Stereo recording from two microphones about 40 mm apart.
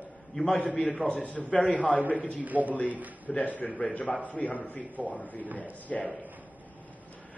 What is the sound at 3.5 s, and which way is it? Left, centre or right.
A man's voice, left.